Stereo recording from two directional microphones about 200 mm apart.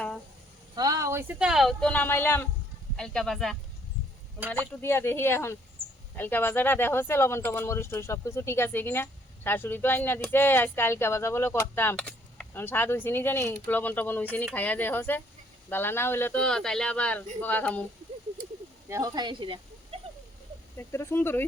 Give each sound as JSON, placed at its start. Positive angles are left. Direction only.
{"t": 0.8, "sound": "speech", "side_deg": -15}
{"t": 18.9, "sound": "speech", "side_deg": -15}
{"t": 20.7, "sound": "speech", "side_deg": 15}